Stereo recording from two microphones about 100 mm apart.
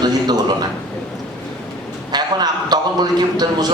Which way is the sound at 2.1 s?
45° right (ahead or behind).